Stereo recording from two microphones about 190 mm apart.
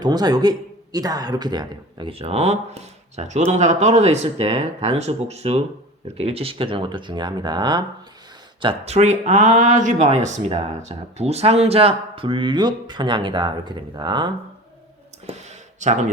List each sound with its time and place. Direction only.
0.0 s speech: 20° right (ahead or behind)
8.6 s speech: 35° right (ahead or behind)
15.3 s a sound: 35° right (ahead or behind)